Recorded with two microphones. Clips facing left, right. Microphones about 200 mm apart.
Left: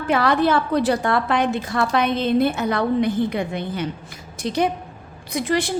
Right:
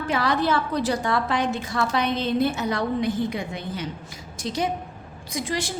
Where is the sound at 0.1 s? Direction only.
60° left (ahead or behind).